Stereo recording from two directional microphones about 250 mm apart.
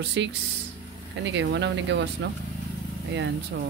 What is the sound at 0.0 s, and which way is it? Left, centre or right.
Speech, right.